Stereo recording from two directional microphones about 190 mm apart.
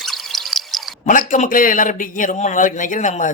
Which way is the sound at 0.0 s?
Centre (ahead or behind).